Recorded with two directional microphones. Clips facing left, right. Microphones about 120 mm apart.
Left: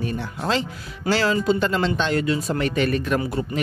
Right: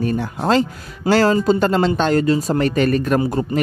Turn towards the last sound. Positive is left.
turn(degrees=-40)  # may be behind; listen again after turning